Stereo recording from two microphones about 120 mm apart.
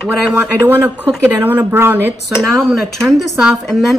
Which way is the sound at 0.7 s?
15° right (ahead or behind).